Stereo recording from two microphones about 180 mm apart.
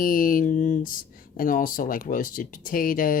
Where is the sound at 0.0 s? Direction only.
50° left (ahead or behind).